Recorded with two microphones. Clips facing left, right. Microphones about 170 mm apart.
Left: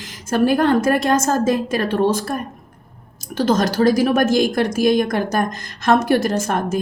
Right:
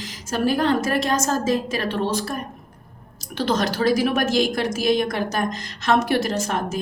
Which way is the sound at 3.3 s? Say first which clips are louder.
Left 5 dB; 45° left (ahead or behind).